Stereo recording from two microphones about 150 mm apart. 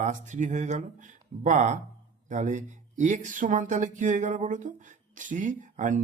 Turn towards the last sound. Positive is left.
turn(degrees=-55)  # may be behind; listen again after turning